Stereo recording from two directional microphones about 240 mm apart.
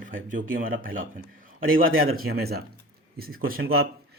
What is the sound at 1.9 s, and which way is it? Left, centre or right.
Speech, right.